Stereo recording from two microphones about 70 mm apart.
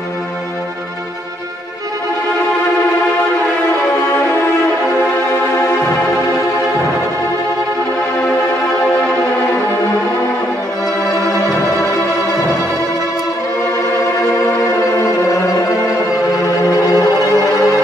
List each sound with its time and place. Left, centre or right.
3.9 s music: left
14.3 s music: left